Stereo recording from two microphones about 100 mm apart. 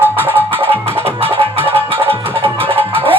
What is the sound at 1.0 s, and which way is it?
Music, 80° right.